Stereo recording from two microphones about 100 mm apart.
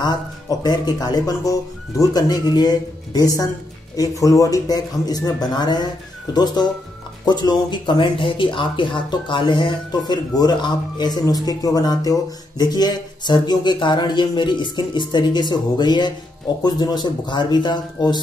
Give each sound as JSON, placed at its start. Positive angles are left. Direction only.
{"t": 0.0, "sound": "speech", "side_deg": 45}